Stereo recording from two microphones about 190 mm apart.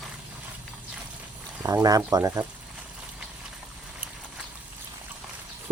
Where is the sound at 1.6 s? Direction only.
20° right (ahead or behind).